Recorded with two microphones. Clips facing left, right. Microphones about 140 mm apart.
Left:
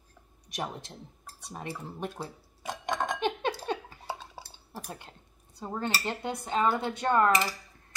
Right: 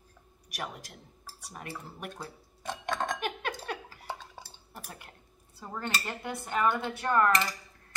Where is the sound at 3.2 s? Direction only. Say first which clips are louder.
Left 5 dB; 25° left (ahead or behind).